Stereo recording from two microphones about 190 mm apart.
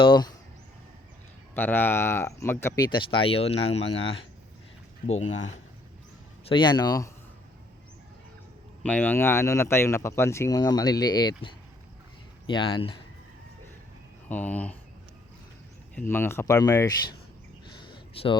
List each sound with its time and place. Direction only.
0.0 s speech: 25° left (ahead or behind)
1.5 s speech: 10° left (ahead or behind); by 5.4 s 35° left (ahead or behind)
6.5 s speech: 25° left (ahead or behind)
8.8 s speech: 5° left (ahead or behind)
12.5 s speech: 25° left (ahead or behind)
14.3 s speech: 10° left (ahead or behind)
16.0 s speech: 10° left (ahead or behind)
17.7 s a sound: 25° left (ahead or behind)